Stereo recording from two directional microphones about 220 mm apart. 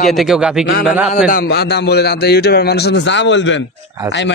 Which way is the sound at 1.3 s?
45° left (ahead or behind).